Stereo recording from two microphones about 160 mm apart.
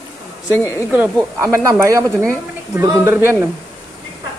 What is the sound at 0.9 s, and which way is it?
Speech, 10° right (ahead or behind).